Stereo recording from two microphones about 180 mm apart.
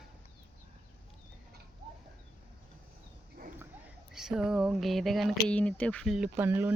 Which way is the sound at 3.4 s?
55° right (ahead or behind).